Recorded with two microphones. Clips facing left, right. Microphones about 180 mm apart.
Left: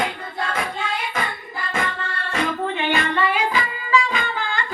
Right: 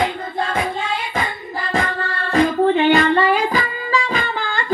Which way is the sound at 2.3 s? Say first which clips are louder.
Right 9 dB; 35° right (ahead or behind).